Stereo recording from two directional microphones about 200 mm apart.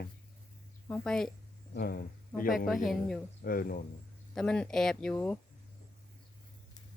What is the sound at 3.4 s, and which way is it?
Speech, 45° left (ahead or behind).